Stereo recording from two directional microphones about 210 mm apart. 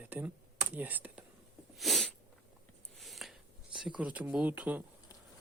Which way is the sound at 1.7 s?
Centre (ahead or behind).